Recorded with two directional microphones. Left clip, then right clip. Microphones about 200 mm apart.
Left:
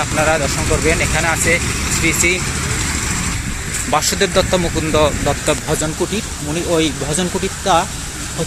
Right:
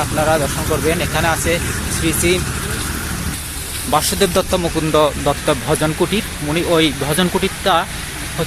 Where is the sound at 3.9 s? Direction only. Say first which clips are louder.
Even; 10° right (ahead or behind).